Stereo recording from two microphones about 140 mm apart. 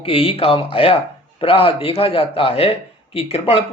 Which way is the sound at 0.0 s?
45° left (ahead or behind).